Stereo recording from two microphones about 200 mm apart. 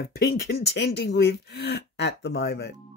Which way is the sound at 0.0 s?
50° left (ahead or behind).